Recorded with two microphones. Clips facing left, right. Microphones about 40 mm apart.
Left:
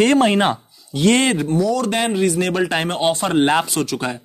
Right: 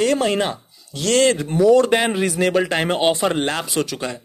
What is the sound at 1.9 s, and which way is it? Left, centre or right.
Speech, centre.